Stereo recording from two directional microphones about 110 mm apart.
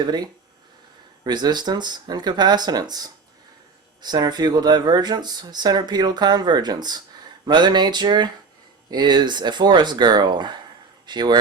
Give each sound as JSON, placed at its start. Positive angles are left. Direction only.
{"t": 0.0, "sound": "speech", "side_deg": -40}